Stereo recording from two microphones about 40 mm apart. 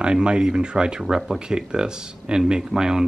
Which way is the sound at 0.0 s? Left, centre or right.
Right.